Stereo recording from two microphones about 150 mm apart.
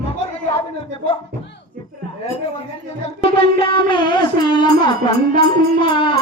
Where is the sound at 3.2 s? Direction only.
40° left (ahead or behind).